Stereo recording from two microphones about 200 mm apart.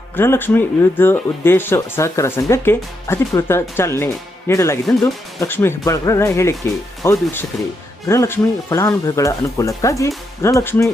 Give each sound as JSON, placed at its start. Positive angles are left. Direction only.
{"t": 0.2, "sound": "speech", "side_deg": 10}